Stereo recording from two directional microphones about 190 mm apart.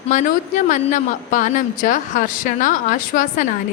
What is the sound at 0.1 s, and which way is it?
A woman's voice, 40° left (ahead or behind).